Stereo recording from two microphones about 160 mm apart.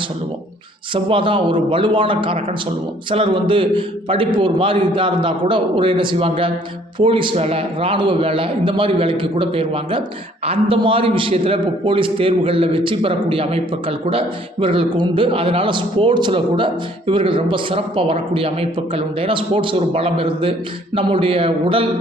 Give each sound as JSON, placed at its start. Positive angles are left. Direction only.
{"t": 0.9, "sound": "a man's voice", "side_deg": -35}